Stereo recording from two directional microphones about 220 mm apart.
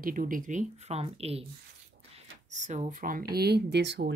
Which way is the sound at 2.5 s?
30° right (ahead or behind).